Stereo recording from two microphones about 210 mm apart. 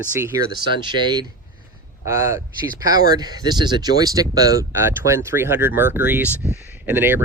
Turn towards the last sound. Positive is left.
turn(degrees=-10)  # may be behind; listen again after turning